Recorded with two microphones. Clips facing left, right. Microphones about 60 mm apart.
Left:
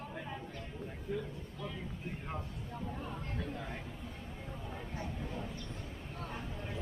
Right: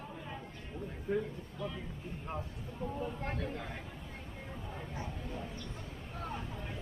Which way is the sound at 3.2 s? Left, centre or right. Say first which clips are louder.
Right 2 dB; right.